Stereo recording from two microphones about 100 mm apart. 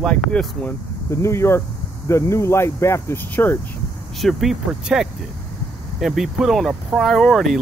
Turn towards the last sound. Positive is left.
turn(degrees=0)  # may be behind; listen again after turning